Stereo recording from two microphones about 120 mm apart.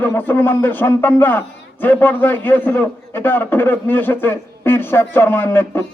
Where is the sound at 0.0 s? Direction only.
15° left (ahead or behind).